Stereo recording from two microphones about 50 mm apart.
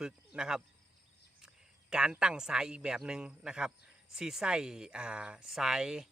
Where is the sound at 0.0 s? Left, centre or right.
Centre.